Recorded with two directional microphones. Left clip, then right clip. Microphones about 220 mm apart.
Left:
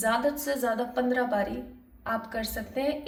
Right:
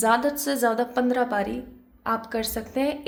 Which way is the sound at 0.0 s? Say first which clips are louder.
Right 5 dB; 55° right (ahead or behind).